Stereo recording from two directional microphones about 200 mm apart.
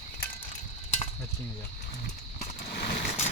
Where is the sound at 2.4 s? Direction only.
50° left (ahead or behind).